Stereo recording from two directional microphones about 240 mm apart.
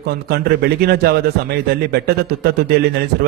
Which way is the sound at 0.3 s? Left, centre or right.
Right.